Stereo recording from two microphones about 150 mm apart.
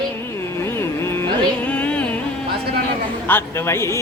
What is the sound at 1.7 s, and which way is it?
Music, 10° left (ahead or behind).